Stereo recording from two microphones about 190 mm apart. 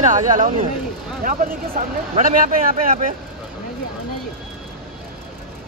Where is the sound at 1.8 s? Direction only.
40° right (ahead or behind).